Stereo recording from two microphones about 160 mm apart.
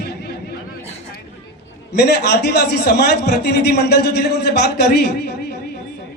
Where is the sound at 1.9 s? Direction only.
90° left.